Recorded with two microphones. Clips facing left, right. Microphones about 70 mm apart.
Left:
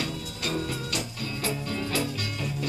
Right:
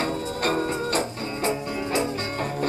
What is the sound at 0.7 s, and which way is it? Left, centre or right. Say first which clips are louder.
Music: right 7 dB; right.